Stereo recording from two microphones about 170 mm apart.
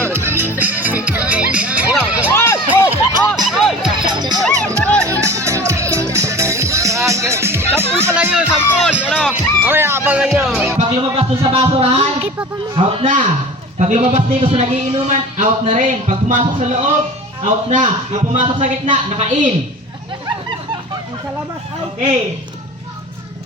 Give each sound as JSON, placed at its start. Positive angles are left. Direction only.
{"t": 0.0, "sound": "music", "side_deg": -15}
{"t": 2.3, "sound": "music", "side_deg": 15}
{"t": 2.9, "sound": "music", "side_deg": -20}
{"t": 4.8, "sound": "music", "side_deg": 5}
{"t": 5.0, "sound": "music", "side_deg": -15}
{"t": 10.8, "sound": "a sound", "side_deg": -35}
{"t": 13.7, "sound": "a man's voice", "side_deg": -45}